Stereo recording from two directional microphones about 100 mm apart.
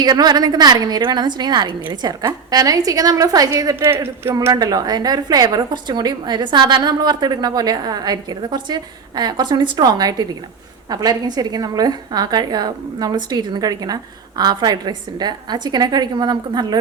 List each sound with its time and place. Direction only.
0.0 s a woman's voice: 45° right (ahead or behind)
3.8 s speech: 25° right (ahead or behind)
4.5 s a woman's voice: 40° right (ahead or behind)